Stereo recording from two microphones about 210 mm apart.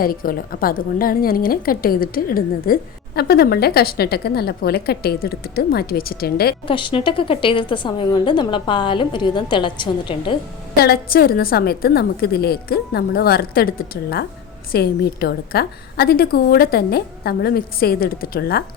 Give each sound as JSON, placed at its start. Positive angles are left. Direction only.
{"t": 0.0, "sound": "a woman's voice", "side_deg": 45}
{"t": 6.7, "sound": "a woman's voice", "side_deg": 25}
{"t": 10.8, "sound": "a woman's voice", "side_deg": 45}